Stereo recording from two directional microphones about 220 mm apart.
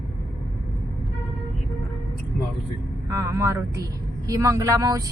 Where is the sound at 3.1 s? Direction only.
15° right (ahead or behind).